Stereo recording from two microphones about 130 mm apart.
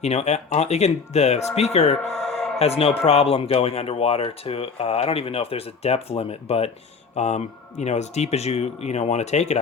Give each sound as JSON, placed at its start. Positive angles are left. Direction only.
{"t": 0.0, "sound": "speech", "side_deg": 55}
{"t": 2.2, "sound": "a sound", "side_deg": 5}
{"t": 2.6, "sound": "speech", "side_deg": 50}